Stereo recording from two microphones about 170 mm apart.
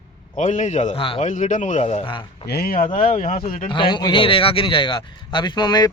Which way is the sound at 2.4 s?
65° left (ahead or behind).